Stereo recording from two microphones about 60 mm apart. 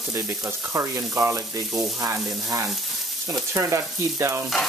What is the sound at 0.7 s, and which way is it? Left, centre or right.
Frying, right.